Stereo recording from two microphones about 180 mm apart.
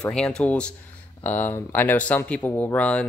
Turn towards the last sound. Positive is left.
turn(degrees=5)  # may be behind; listen again after turning